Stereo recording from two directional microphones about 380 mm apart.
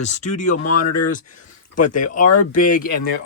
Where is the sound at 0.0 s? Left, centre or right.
Centre.